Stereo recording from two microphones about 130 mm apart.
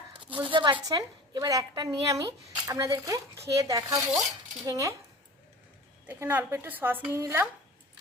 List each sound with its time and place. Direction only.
0.1 s a sound: 40° right (ahead or behind)
0.5 s a woman's voice: 35° right (ahead or behind)
6.1 s a woman's voice: 15° right (ahead or behind)